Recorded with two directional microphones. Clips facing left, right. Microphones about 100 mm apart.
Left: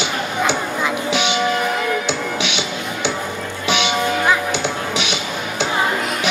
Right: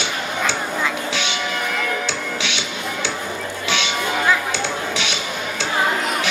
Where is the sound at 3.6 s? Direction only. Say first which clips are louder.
Left 5 dB; 15° left (ahead or behind).